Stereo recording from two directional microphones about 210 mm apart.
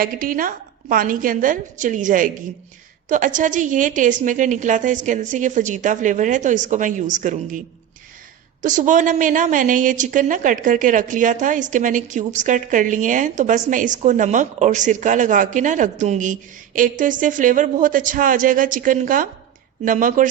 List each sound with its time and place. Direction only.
0.0 s a woman's voice: 40° right (ahead or behind)
8.6 s a woman's voice: 35° right (ahead or behind)